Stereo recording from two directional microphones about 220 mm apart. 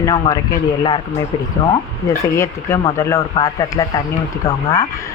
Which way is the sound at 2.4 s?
15° left (ahead or behind).